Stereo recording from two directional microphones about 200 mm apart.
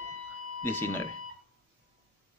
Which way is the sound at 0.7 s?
10° left (ahead or behind).